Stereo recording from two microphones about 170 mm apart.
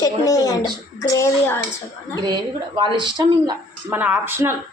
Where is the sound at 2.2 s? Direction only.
25° right (ahead or behind).